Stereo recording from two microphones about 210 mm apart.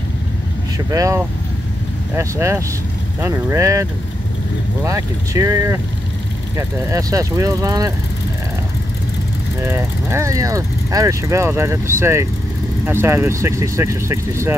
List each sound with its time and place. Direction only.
0.7 s speech: 15° right (ahead or behind)
4.8 s speech: 15° right (ahead or behind)
9.6 s speech: 10° right (ahead or behind)